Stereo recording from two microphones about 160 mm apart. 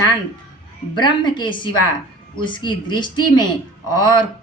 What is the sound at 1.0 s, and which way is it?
A woman's voice, 30° left (ahead or behind).